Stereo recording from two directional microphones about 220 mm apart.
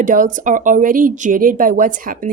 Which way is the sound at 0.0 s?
35° right (ahead or behind).